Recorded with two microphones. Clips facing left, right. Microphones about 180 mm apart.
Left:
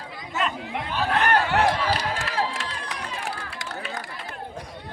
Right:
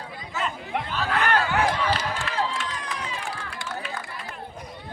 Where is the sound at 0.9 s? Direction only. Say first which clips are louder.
Left 3 dB; 20° left (ahead or behind).